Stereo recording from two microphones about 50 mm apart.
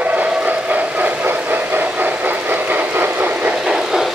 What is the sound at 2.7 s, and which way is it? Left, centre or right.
Train, right.